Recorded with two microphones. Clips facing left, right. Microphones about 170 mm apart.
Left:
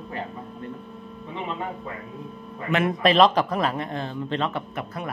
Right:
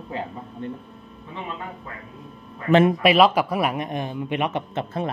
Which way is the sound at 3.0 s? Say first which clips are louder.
Right 1 dB; 10° right (ahead or behind).